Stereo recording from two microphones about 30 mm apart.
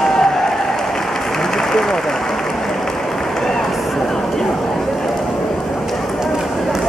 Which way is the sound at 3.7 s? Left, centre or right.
Centre.